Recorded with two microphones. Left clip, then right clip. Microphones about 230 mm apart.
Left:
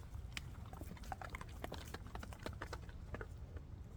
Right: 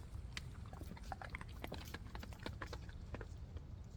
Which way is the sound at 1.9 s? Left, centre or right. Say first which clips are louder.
Left 1 dB; left.